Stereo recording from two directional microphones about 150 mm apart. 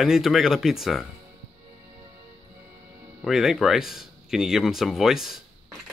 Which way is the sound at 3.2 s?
Centre (ahead or behind).